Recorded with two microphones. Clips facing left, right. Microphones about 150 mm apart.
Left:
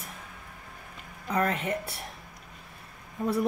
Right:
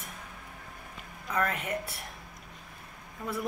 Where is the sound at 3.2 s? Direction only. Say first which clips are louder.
Left 8 dB; 40° left (ahead or behind).